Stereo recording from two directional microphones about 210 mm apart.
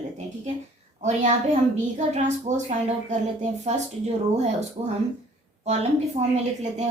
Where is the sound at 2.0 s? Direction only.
35° right (ahead or behind).